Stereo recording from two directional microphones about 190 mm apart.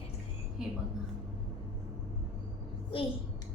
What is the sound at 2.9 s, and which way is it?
Speech, 25° left (ahead or behind).